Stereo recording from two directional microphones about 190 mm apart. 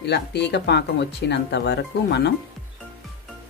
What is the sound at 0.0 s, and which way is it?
Speech, 65° left (ahead or behind).